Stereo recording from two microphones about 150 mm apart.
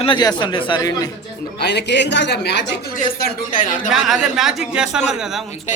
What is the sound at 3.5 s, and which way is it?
Speech, 65° left (ahead or behind).